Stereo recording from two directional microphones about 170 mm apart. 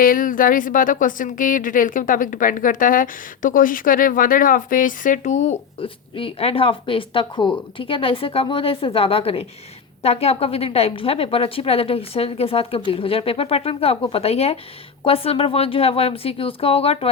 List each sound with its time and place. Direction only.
0.0 s a woman's voice: 55° left (ahead or behind); by 17.1 s 35° left (ahead or behind)